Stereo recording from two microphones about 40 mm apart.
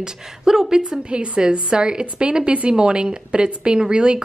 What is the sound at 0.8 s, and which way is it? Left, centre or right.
Speech, right.